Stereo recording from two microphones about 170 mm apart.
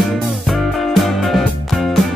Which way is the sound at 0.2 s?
Centre (ahead or behind).